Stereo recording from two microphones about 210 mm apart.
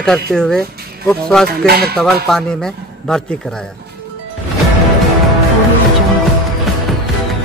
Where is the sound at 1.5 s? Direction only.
50° right (ahead or behind).